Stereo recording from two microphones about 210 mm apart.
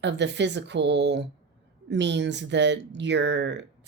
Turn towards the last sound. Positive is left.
turn(degrees=-55)  # may be behind; listen again after turning